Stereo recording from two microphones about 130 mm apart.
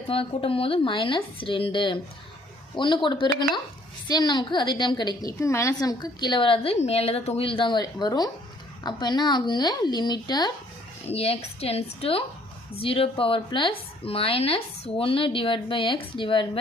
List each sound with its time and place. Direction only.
0.1 s a woman's voice: 45° left (ahead or behind)
11.1 s speech: 50° left (ahead or behind)